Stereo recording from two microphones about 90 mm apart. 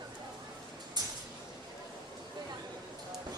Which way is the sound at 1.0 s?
50° right (ahead or behind).